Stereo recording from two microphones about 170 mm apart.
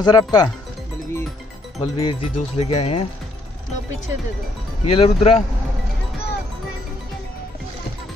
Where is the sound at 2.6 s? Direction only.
35° left (ahead or behind).